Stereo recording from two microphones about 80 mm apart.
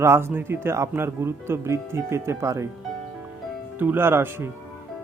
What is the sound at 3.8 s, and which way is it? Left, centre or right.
Speech, right.